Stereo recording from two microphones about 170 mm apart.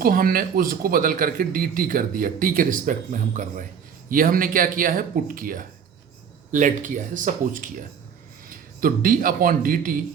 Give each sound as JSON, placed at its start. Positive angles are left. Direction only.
{"t": 0.0, "sound": "speech", "side_deg": -55}